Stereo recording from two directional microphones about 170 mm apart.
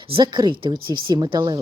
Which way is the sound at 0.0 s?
30° right (ahead or behind).